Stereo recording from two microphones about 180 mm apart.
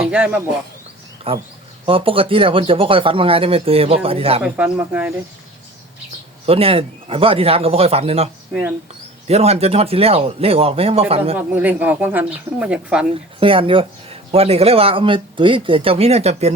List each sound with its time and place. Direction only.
0.1 s speech: 5° right (ahead or behind)
1.3 s speech: 30° right (ahead or behind)
4.4 s speech: 10° right (ahead or behind)
6.1 s speech: 35° right (ahead or behind)
11.3 s speech: 10° right (ahead or behind)
13.4 s speech: 30° right (ahead or behind)